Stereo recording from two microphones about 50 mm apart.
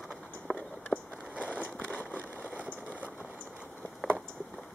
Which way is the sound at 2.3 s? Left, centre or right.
Right.